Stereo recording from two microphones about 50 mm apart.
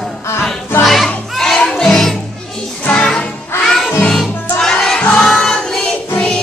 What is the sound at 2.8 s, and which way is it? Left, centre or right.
Music, centre.